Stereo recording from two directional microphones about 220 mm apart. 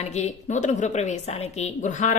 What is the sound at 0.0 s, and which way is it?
A woman's voice, 30° left (ahead or behind).